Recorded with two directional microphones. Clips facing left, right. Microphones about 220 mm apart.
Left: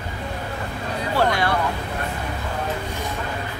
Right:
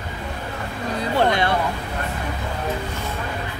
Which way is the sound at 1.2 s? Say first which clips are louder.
Right 1 dB; 20° right (ahead or behind).